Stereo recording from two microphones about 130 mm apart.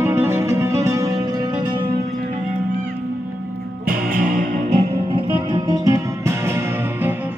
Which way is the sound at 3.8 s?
90° right.